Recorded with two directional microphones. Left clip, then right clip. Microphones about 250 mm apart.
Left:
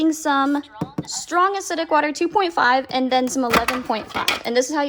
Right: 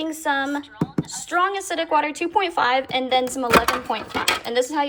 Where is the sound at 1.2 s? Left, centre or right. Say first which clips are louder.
Left 3 dB; centre.